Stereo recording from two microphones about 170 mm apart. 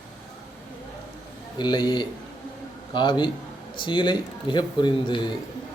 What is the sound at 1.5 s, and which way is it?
Speech, 25° left (ahead or behind).